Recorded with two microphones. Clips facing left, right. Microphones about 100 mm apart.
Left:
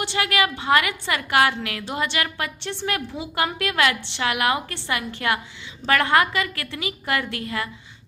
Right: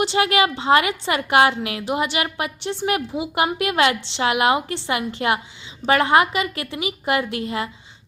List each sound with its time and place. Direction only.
0.0 s a woman's voice: 20° right (ahead or behind)